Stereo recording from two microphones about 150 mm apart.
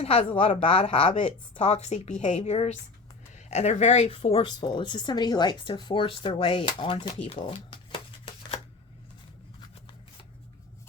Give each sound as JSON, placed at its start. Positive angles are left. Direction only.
{"t": 0.0, "sound": "a woman's voice", "side_deg": 40}